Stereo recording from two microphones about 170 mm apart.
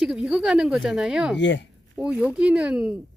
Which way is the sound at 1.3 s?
90° left.